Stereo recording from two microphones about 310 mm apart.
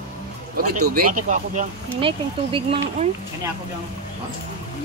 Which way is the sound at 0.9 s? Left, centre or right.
Right.